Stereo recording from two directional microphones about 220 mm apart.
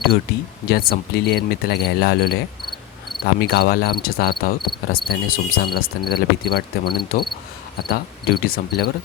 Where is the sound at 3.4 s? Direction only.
45° left (ahead or behind).